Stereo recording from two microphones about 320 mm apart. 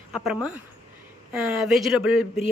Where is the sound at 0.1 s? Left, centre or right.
Centre.